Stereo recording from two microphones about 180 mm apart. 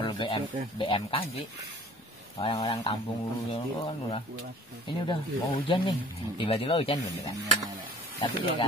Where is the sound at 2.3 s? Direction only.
30° left (ahead or behind).